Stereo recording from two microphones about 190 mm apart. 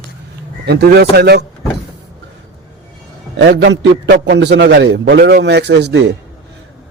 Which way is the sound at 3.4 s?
65° right (ahead or behind).